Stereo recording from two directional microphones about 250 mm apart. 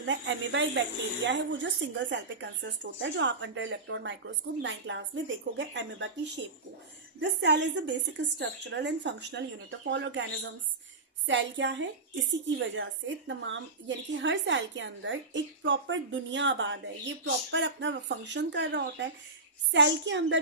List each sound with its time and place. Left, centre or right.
0.1 s a woman's voice: right
11.3 s a woman's voice: right